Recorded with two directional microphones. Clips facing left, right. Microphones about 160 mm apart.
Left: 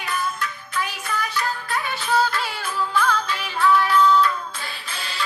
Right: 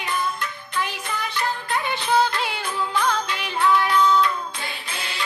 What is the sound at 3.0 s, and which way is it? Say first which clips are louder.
Music: left 1 dB; 20° right (ahead or behind).